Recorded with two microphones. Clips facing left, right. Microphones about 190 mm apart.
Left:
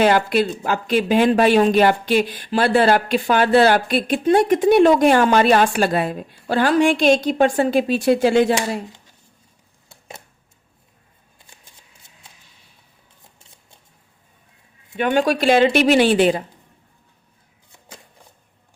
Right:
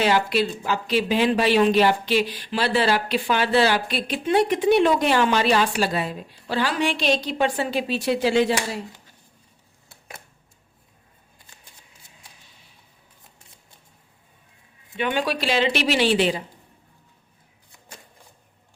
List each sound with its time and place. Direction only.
0.0 s speech: 50° left (ahead or behind)
14.9 s speech: 45° left (ahead or behind)